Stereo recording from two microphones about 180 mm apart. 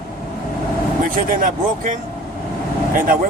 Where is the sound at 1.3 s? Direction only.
50° right (ahead or behind).